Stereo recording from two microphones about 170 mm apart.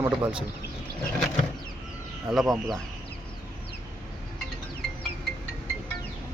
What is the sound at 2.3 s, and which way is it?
Speech, centre (ahead or behind).